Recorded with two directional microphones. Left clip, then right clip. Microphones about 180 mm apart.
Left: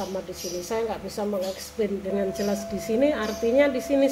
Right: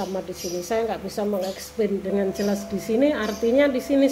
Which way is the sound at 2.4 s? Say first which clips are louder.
Right 1 dB; 25° right (ahead or behind).